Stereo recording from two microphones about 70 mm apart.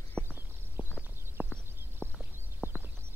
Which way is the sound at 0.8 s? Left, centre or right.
Right.